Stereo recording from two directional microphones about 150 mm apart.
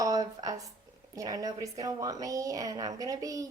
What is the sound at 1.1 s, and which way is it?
A woman's voice, 25° right (ahead or behind).